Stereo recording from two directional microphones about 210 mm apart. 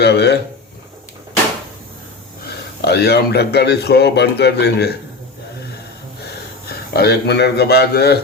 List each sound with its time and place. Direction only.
0.0 s a man's voice: 55° left (ahead or behind)
2.8 s a man's voice: 50° left (ahead or behind)
6.7 s a man's voice: 50° left (ahead or behind)